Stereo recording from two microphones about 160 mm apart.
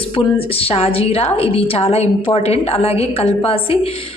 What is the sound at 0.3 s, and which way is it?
A woman's voice, 35° left (ahead or behind).